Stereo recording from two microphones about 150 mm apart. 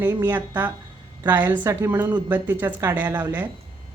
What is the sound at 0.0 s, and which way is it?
A woman's voice, 15° right (ahead or behind).